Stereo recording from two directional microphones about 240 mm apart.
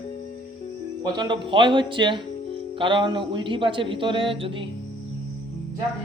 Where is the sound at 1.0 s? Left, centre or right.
Centre.